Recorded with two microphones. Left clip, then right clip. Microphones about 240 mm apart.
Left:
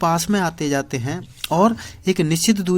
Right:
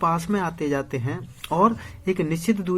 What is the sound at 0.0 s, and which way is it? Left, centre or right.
Speech, left.